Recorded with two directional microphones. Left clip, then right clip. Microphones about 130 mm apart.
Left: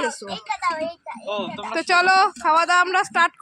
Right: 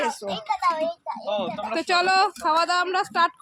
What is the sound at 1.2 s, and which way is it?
Speech, 45° right (ahead or behind).